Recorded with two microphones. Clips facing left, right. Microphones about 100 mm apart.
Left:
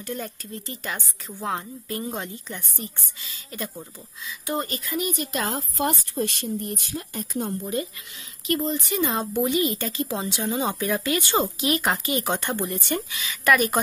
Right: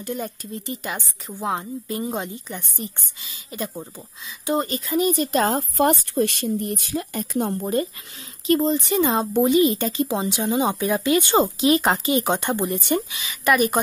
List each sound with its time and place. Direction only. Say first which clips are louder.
0.0 s speech: right 3 dB; 15° right (ahead or behind); by 5.9 s 40° right (ahead or behind)
5.9 s speech: right 6 dB; 85° right; by 7.7 s 65° right (ahead or behind)
8.5 s speech: right 6 dB; 25° right (ahead or behind)